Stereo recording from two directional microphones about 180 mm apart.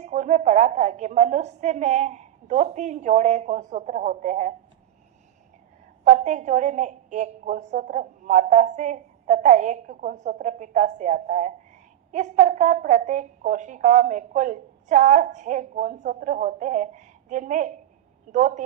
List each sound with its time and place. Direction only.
0.0 s a woman's voice: 40° right (ahead or behind)
6.1 s a woman's voice: 40° right (ahead or behind)